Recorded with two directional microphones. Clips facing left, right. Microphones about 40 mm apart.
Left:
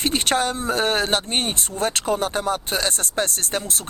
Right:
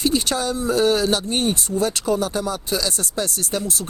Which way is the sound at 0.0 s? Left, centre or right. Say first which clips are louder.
Even; left.